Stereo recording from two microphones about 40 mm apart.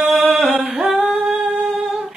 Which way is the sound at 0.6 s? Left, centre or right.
Right.